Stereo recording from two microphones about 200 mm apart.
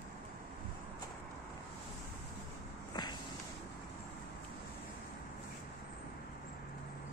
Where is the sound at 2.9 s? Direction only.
20° left (ahead or behind).